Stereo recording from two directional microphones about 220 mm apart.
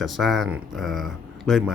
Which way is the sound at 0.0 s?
Centre (ahead or behind).